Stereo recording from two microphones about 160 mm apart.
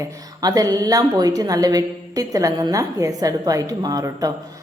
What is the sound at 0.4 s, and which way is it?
A woman's voice, 25° right (ahead or behind).